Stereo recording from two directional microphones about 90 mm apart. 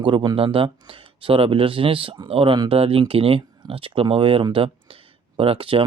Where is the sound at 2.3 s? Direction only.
90° right.